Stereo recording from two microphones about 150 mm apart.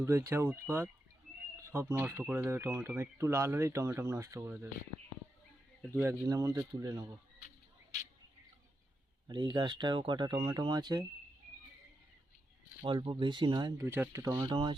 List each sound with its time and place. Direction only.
0.0 s speech: 20° right (ahead or behind)
5.9 s speech: 15° right (ahead or behind)
9.2 s speech: 30° right (ahead or behind)
12.8 s speech: 35° right (ahead or behind)
14.5 s speech: 35° right (ahead or behind)